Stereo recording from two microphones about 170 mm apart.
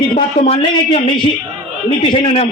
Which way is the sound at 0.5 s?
35° left (ahead or behind).